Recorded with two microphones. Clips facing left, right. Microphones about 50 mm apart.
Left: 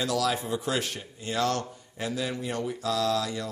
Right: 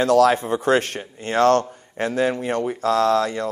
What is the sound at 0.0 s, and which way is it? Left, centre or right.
Speech, right.